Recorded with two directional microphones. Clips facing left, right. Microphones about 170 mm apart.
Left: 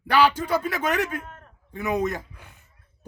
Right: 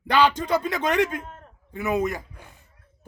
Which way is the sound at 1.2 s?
30° right (ahead or behind).